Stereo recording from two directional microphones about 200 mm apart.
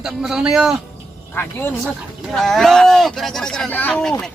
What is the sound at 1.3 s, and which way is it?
Speech, 10° left (ahead or behind).